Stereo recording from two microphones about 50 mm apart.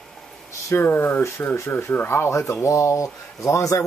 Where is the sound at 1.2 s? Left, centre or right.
Left.